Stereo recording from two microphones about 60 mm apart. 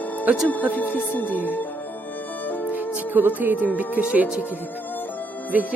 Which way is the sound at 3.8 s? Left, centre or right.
Right.